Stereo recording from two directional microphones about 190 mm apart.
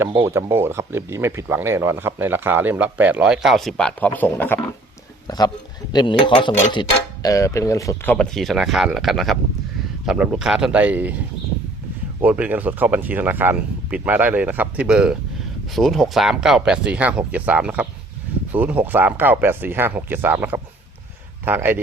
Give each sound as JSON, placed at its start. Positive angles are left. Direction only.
{"t": 0.0, "sound": "a man's voice", "side_deg": -15}
{"t": 12.2, "sound": "speech", "side_deg": -10}